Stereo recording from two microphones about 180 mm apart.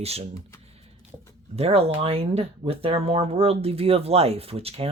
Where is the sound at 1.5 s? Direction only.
35° right (ahead or behind).